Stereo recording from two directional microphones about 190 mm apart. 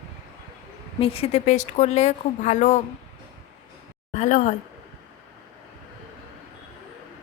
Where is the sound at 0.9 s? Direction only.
30° left (ahead or behind).